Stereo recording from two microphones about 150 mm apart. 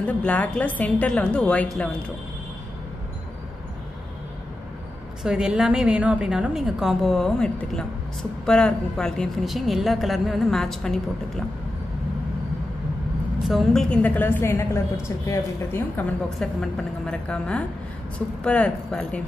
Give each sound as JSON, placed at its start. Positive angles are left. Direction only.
{"t": 0.0, "sound": "a woman's voice", "side_deg": 10}
{"t": 5.2, "sound": "a woman's voice", "side_deg": -5}
{"t": 13.4, "sound": "a woman's voice", "side_deg": 0}
{"t": 16.3, "sound": "a woman's voice", "side_deg": 5}